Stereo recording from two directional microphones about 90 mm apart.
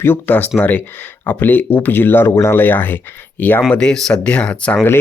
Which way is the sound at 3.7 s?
10° left (ahead or behind).